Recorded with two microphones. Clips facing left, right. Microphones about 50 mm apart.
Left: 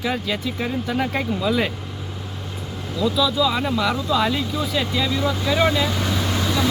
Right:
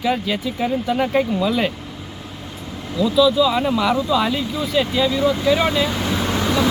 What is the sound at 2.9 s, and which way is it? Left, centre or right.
Speech, centre.